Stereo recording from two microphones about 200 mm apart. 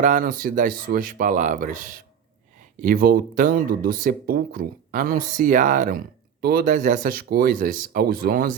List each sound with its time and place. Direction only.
0.0 s speech: 40° right (ahead or behind)